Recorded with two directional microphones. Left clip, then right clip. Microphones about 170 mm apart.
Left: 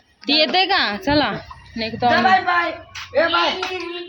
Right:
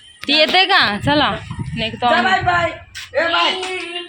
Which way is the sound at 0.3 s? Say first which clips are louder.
Right 3 dB; 10° right (ahead or behind).